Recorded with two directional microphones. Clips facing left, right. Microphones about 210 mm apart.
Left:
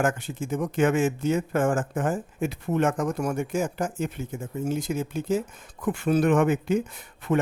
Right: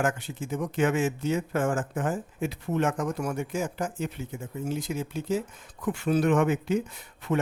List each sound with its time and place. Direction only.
0.0 s speech: 50° left (ahead or behind)